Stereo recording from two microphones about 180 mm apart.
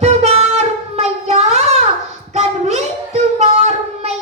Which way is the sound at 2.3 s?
40° right (ahead or behind).